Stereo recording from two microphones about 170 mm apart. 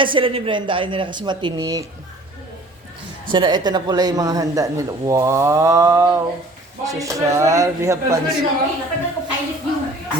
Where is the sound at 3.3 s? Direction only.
25° right (ahead or behind).